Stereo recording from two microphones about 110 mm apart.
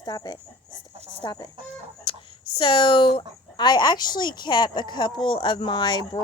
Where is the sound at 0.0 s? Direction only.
40° left (ahead or behind).